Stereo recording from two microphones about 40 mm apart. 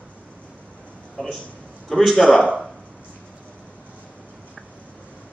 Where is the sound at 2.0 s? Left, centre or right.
Centre.